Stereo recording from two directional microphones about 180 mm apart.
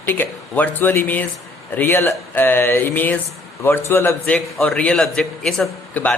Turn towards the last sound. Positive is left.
turn(degrees=5)  # may be behind; listen again after turning